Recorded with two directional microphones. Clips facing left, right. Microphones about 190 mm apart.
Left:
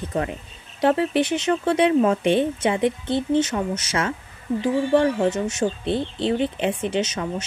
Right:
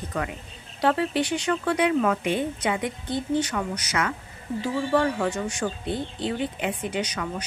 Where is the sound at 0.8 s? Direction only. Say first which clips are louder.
Left 4 dB; 25° left (ahead or behind).